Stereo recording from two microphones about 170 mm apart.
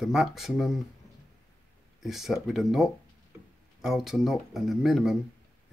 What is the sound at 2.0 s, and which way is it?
Speech, centre (ahead or behind).